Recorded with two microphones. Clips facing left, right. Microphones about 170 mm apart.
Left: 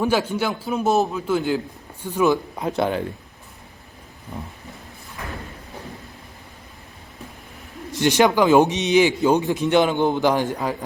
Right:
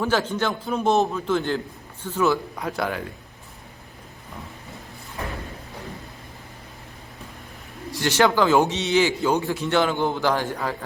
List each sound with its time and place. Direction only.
0.0 s a man's voice: 10° left (ahead or behind)
7.9 s a man's voice: 20° left (ahead or behind)